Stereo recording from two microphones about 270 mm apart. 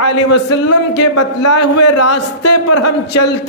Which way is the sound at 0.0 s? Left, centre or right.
Left.